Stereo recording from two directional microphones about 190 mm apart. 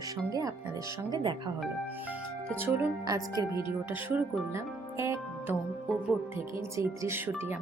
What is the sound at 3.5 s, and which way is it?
Speech, 25° left (ahead or behind).